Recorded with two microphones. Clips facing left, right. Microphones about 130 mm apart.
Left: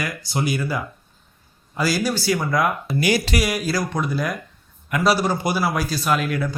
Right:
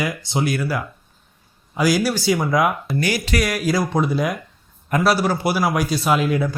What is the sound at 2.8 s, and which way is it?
Speech, 10° left (ahead or behind).